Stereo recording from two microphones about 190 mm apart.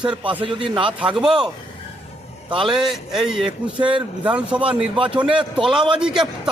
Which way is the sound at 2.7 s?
Centre (ahead or behind).